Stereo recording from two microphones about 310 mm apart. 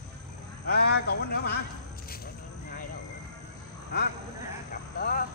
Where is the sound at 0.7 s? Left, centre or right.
Left.